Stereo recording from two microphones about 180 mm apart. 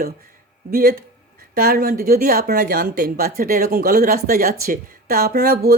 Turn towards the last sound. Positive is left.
turn(degrees=-55)  # may be behind; listen again after turning